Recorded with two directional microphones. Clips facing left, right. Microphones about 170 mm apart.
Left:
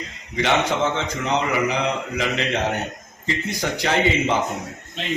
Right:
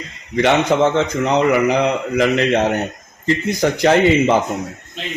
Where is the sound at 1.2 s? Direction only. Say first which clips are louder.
Right 6 dB; 55° right (ahead or behind).